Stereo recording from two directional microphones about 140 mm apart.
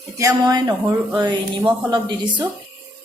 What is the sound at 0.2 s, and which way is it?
A woman's voice, 25° right (ahead or behind).